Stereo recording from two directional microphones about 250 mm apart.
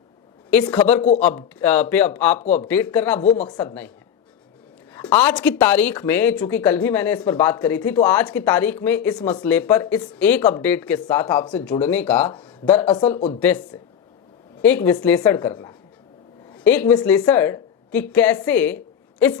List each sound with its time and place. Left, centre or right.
0.5 s speech: centre
4.9 s speech: centre
13.1 s speech: left
14.6 s speech: centre